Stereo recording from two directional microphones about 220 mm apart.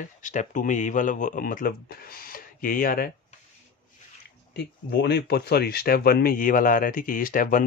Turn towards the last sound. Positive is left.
turn(degrees=40)  # may be behind; listen again after turning